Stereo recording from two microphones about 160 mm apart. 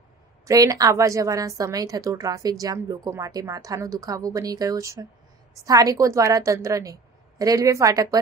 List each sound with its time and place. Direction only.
0.5 s a woman's voice: 20° right (ahead or behind)